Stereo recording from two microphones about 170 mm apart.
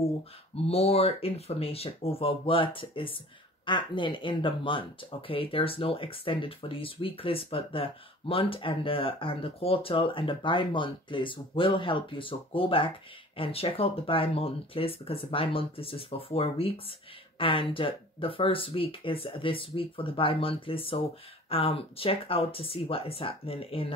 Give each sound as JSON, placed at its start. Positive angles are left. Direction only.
{"t": 0.7, "sound": "speech", "side_deg": 35}